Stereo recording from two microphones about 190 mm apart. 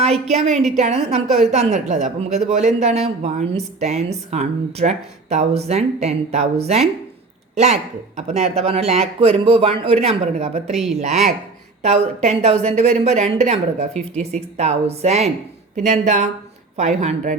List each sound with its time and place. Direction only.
0.0 s a woman's voice: 35° right (ahead or behind)